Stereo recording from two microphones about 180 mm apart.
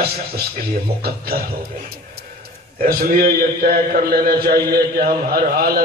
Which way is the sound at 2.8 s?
55° right (ahead or behind).